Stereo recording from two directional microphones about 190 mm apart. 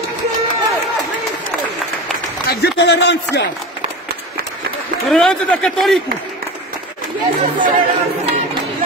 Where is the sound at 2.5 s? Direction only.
65° left (ahead or behind).